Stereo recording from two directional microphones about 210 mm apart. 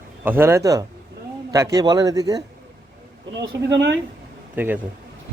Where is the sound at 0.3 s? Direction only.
10° right (ahead or behind).